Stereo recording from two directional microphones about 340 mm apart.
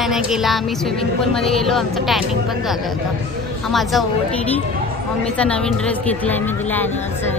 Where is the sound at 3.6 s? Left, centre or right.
Centre.